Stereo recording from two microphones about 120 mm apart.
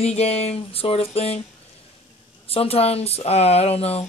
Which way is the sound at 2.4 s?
55° left (ahead or behind).